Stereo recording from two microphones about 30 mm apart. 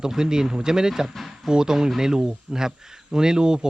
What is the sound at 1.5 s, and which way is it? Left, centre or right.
Speech, right.